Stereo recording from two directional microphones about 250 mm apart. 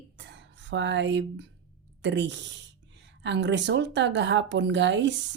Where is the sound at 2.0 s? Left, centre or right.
Right.